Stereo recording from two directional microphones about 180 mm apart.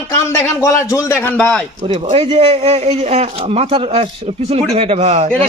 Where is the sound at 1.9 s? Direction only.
35° right (ahead or behind).